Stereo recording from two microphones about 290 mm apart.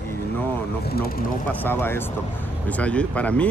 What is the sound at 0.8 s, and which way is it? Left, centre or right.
Vehicle, left.